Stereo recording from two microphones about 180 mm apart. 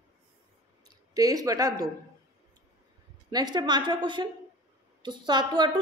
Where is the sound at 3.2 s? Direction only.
25° right (ahead or behind).